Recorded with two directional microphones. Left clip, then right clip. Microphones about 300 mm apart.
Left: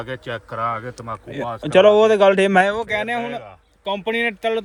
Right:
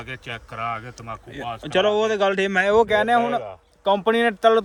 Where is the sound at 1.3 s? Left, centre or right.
Centre.